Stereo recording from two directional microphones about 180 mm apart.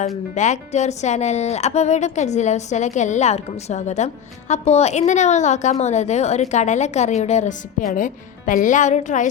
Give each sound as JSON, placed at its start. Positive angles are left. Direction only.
{"t": 0.3, "sound": "a woman's voice", "side_deg": 40}